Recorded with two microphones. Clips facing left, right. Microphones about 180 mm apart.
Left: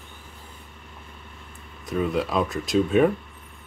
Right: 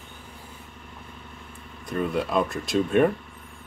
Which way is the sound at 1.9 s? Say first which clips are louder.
Left 1 dB; centre (ahead or behind).